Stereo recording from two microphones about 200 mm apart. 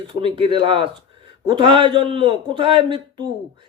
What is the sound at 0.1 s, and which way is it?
Speech, 25° right (ahead or behind).